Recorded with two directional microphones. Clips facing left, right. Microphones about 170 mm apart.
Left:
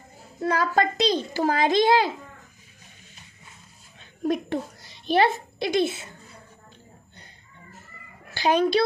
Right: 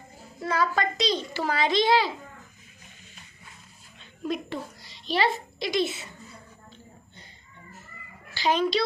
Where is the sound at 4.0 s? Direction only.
50° left (ahead or behind).